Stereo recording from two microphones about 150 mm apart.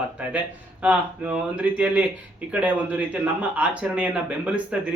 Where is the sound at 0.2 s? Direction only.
10° right (ahead or behind).